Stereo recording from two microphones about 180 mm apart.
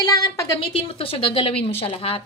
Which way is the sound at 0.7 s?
30° left (ahead or behind).